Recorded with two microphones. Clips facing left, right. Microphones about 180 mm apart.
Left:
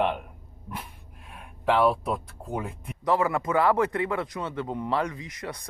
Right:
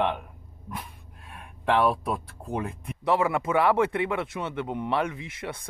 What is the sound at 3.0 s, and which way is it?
Speech, 25° right (ahead or behind).